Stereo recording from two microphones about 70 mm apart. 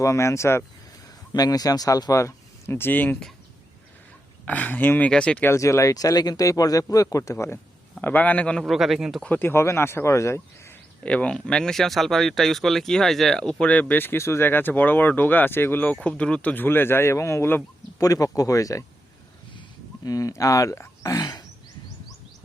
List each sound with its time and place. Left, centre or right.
0.0 s speech: left
1.3 s speech: left
2.2 s speech: left
4.4 s speech: left
5.5 s speech: left
8.0 s speech: left
8.6 s speech: centre
9.2 s speech: left
11.0 s speech: centre
13.7 s speech: left
18.0 s speech: left
20.1 s speech: left
21.1 s a sound: left